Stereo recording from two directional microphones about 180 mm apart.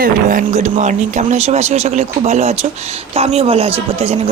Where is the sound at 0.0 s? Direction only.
50° right (ahead or behind).